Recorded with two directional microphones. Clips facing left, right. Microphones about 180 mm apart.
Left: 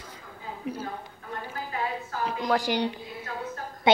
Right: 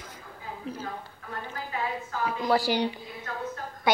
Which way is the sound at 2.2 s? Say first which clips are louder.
Right 1 dB; 5° right (ahead or behind).